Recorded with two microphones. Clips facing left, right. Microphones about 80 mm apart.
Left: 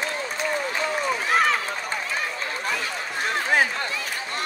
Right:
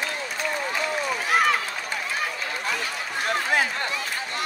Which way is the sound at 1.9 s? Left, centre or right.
Left.